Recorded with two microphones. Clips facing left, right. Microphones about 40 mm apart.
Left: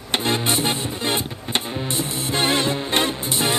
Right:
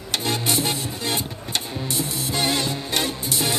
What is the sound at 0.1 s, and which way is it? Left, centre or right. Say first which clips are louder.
Music: left 3 dB; left.